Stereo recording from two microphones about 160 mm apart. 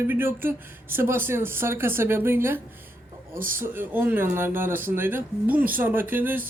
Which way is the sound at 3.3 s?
60° right (ahead or behind).